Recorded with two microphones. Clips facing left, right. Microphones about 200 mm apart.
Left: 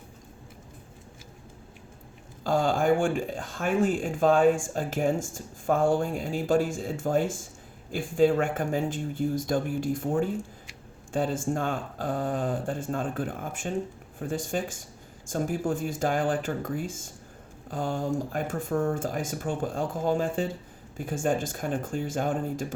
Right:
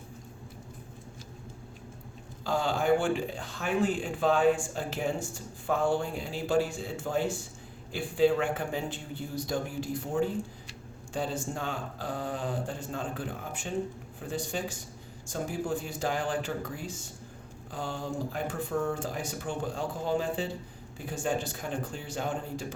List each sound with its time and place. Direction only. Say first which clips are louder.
2.4 s speech: left 4 dB; 50° left (ahead or behind)